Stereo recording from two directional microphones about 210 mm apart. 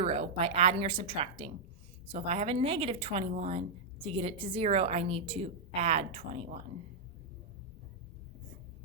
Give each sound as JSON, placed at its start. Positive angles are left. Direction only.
{"t": 0.0, "sound": "a woman's voice", "side_deg": -30}